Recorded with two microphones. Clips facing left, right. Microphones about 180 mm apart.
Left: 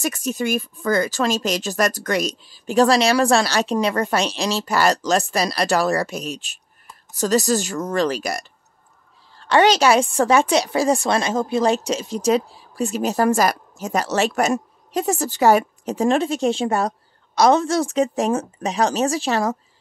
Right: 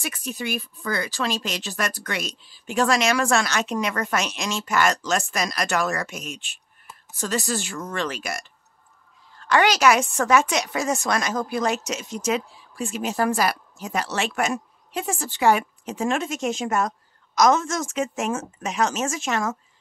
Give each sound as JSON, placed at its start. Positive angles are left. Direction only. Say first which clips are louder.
{"t": 0.0, "sound": "speech", "louder": "left 7 dB", "side_deg": 40}